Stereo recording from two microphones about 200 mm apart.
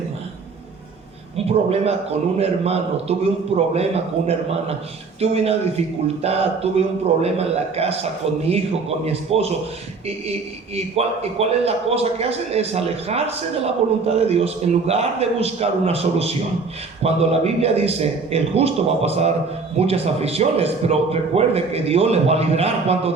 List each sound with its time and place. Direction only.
1.5 s a man's voice: 30° right (ahead or behind)
4.3 s a man's voice: 30° right (ahead or behind)
10.8 s a man's voice: 30° right (ahead or behind)